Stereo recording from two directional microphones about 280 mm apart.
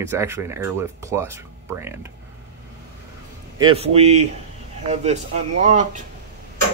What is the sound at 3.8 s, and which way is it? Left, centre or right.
A man's voice, right.